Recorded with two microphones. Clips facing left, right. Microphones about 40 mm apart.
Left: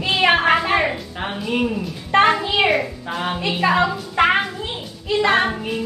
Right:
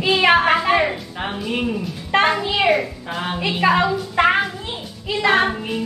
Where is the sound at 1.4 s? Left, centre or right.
Centre.